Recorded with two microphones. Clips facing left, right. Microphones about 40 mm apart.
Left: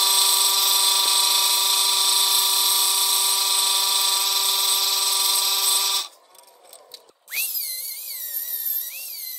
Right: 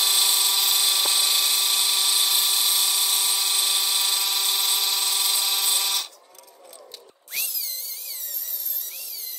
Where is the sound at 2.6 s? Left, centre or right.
Centre.